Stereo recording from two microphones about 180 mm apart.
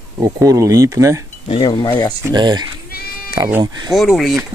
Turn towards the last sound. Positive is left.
turn(degrees=0)  # may be behind; listen again after turning